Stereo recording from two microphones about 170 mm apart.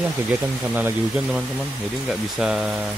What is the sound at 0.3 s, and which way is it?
Speech, 10° right (ahead or behind).